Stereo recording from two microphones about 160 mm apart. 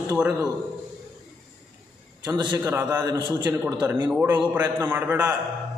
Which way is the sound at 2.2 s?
25° right (ahead or behind).